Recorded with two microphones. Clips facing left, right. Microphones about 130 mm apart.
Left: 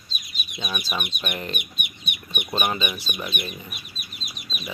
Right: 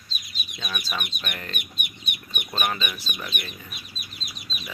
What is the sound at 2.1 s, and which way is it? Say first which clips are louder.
Chicken: left 1 dB; 45° right (ahead or behind).